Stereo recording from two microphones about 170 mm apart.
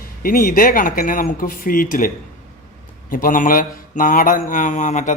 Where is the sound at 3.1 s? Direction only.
50° left (ahead or behind).